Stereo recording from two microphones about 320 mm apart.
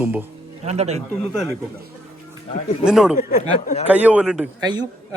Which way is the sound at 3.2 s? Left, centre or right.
Left.